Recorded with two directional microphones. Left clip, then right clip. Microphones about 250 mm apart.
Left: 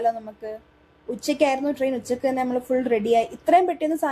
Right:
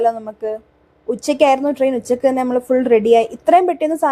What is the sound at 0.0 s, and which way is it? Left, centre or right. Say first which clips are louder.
A woman's voice: right 7 dB; right.